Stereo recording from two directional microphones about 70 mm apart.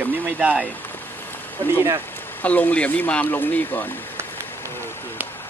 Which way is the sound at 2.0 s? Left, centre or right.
Left.